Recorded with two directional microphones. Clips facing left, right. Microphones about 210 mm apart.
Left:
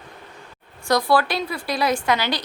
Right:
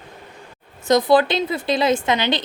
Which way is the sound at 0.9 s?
20° right (ahead or behind).